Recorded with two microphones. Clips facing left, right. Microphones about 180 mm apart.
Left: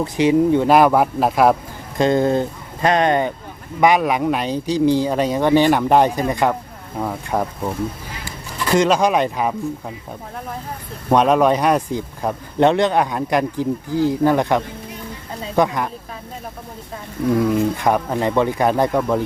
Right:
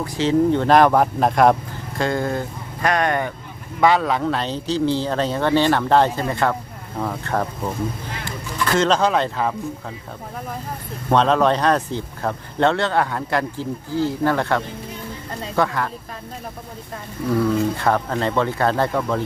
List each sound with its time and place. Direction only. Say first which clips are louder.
0.0 s speech: left 3 dB; 15° left (ahead or behind)
2.0 s speech: left 6 dB; 20° left (ahead or behind)
11.1 s speech: left 2 dB; 10° left (ahead or behind)
17.2 s speech: left 2 dB; 15° left (ahead or behind)